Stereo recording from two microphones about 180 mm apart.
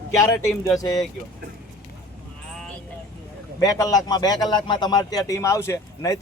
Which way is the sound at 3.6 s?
20° left (ahead or behind).